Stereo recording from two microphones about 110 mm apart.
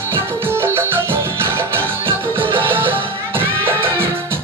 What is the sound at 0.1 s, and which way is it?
Music, 20° right (ahead or behind).